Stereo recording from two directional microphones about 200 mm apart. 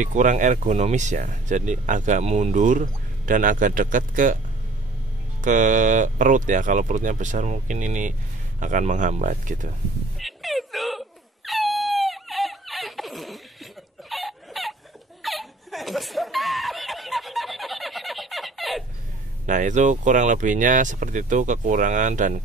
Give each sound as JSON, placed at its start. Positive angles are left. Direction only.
{"t": 0.0, "sound": "speech", "side_deg": -40}
{"t": 5.4, "sound": "speech", "side_deg": -40}
{"t": 10.1, "sound": "a sound", "side_deg": 0}
{"t": 15.2, "sound": "snicker", "side_deg": 0}
{"t": 19.4, "sound": "speech", "side_deg": -40}